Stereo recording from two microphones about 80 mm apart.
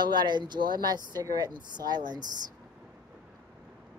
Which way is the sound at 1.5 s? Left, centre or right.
Right.